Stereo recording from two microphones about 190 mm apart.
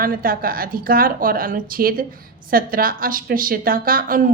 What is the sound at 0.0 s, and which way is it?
A woman's voice, 50° right (ahead or behind).